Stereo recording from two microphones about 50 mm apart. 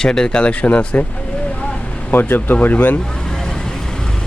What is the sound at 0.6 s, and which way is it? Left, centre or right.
Speech, left.